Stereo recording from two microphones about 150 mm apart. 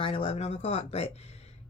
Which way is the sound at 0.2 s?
50° left (ahead or behind).